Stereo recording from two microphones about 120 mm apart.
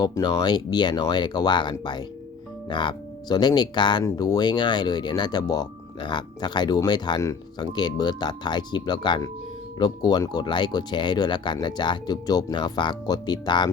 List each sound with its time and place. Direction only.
0.0 s speech: 35° left (ahead or behind)